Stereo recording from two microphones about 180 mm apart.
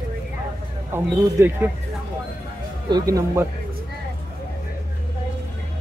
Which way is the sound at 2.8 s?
20° right (ahead or behind).